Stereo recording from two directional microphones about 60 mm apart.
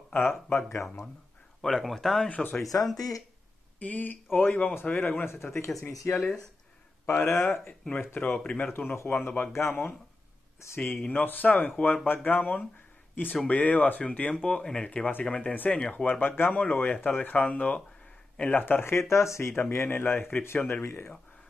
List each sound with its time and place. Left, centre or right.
0.1 s speech: left
1.6 s speech: centre
2.2 s speech: left
2.6 s speech: left
3.8 s speech: left
5.2 s speech: left
5.8 s speech: left
7.2 s speech: left
7.5 s speech: centre
8.0 s speech: left
8.5 s speech: left
8.9 s speech: left
10.9 s speech: left
14.9 s speech: left